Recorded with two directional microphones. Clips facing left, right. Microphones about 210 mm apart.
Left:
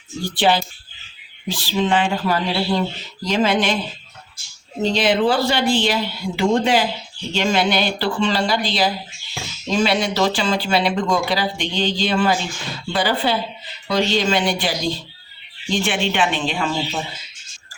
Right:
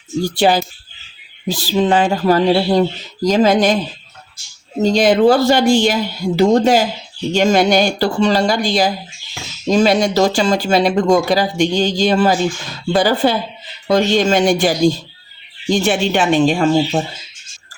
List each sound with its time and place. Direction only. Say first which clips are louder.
0.3 s speech: right 3 dB; 45° right (ahead or behind)
4.8 s speech: right 6 dB; 45° right (ahead or behind)